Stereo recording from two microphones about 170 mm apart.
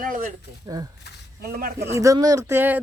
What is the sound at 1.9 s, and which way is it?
Speech, 20° right (ahead or behind).